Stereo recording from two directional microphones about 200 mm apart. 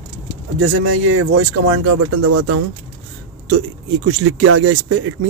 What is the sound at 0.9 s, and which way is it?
Speech, 90° right.